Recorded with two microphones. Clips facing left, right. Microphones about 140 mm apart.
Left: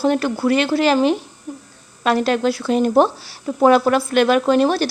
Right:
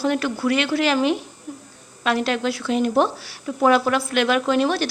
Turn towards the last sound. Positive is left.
turn(degrees=40)  # may be behind; listen again after turning